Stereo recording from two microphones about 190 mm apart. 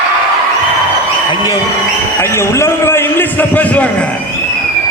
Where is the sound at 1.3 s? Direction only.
20° left (ahead or behind).